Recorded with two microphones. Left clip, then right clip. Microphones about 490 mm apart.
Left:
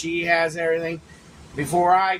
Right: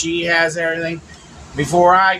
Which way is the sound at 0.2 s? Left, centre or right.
Left.